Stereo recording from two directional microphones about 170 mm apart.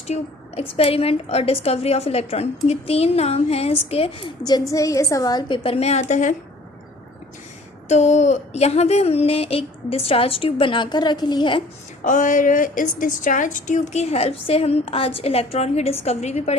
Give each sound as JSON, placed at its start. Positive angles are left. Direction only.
{"t": 0.1, "sound": "a woman's voice", "side_deg": 40}
{"t": 7.9, "sound": "a woman's voice", "side_deg": 40}
{"t": 12.0, "sound": "a woman's voice", "side_deg": 50}